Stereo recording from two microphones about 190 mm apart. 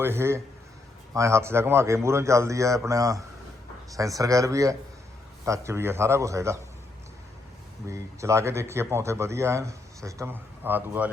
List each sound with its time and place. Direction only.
0.0 s speech: 10° right (ahead or behind)
7.9 s speech: 15° right (ahead or behind)